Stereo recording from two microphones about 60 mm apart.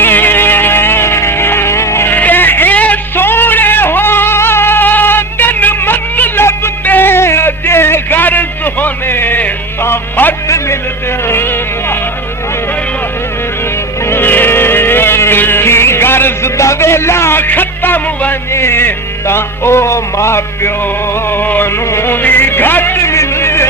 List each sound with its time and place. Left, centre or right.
0.0 s music: left
2.0 s music: left
3.2 s a sound: left
11.3 s music: left
14.1 s music: left
16.6 s music: left
21.2 s music: left
21.8 s music: left